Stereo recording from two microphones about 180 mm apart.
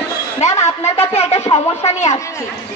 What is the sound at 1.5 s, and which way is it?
Speech, 35° left (ahead or behind).